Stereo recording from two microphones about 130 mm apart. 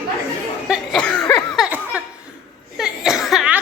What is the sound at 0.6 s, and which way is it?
Cough, 5° right (ahead or behind).